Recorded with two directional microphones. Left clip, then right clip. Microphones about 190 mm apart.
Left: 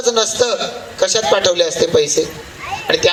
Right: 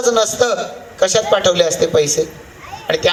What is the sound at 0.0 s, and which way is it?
A man's voice, 80° right.